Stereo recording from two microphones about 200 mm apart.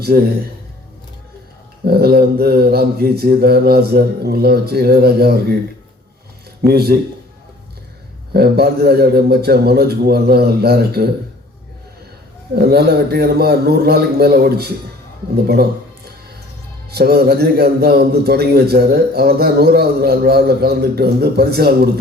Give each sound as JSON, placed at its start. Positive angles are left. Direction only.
{"t": 0.0, "sound": "a man's voice", "side_deg": -50}
{"t": 1.8, "sound": "a man's voice", "side_deg": -50}
{"t": 6.6, "sound": "a man's voice", "side_deg": -50}
{"t": 8.3, "sound": "a man's voice", "side_deg": -50}
{"t": 12.5, "sound": "a man's voice", "side_deg": -50}
{"t": 16.9, "sound": "a man's voice", "side_deg": -50}